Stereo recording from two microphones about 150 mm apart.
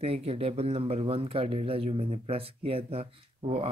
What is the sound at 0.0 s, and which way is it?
Speech, 40° right (ahead or behind).